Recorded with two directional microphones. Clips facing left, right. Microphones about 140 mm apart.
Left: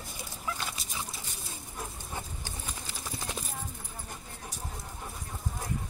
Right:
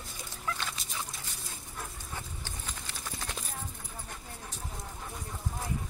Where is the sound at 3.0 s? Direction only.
10° left (ahead or behind).